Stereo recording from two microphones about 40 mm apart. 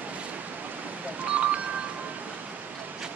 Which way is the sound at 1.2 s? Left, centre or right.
Right.